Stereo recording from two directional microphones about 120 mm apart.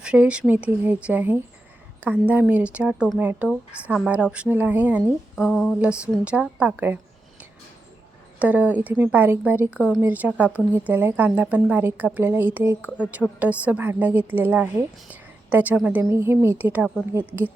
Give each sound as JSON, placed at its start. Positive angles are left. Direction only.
{"t": 0.0, "sound": "a woman's voice", "side_deg": -10}
{"t": 5.5, "sound": "a sound", "side_deg": 5}
{"t": 5.8, "sound": "a woman's voice", "side_deg": -10}
{"t": 8.4, "sound": "a woman's voice", "side_deg": -10}